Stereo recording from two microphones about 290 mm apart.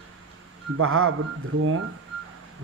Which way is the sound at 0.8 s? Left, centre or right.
Right.